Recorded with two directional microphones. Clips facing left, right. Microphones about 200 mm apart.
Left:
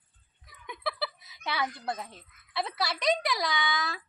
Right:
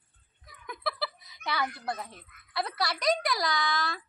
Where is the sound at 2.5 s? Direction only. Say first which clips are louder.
Even; centre (ahead or behind).